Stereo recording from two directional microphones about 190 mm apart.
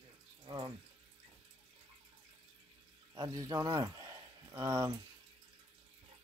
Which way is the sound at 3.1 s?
20° right (ahead or behind).